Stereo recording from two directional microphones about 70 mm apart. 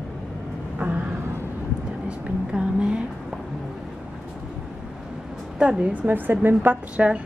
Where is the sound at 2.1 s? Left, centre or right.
Centre.